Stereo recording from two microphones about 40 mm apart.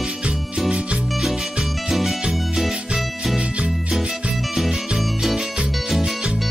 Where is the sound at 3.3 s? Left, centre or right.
Right.